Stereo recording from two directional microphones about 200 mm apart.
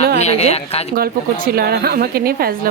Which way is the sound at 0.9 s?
50° right (ahead or behind).